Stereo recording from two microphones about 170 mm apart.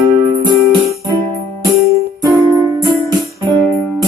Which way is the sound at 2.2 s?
20° right (ahead or behind).